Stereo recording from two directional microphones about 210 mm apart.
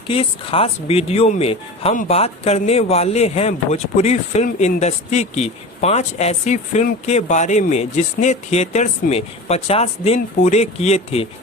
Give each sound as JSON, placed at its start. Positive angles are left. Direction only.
{"t": 0.1, "sound": "speech", "side_deg": 25}